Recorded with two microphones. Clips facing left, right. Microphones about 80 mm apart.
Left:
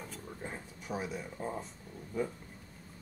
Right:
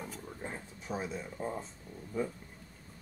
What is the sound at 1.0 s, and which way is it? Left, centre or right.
Speech, centre.